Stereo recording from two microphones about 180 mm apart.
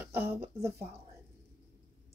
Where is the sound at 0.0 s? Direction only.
10° right (ahead or behind).